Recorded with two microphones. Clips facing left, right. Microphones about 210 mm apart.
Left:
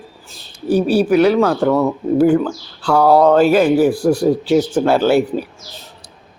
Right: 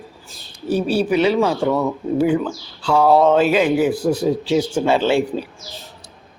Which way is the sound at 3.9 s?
20° right (ahead or behind).